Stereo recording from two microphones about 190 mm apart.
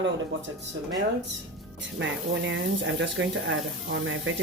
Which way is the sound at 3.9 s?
90° right.